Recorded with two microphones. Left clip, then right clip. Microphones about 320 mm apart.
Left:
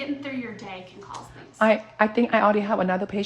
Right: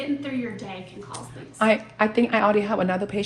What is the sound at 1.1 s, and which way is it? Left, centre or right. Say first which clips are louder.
A woman's voice: right 1 dB; left.